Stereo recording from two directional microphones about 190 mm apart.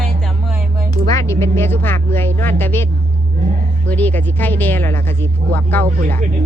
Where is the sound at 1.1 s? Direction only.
15° left (ahead or behind).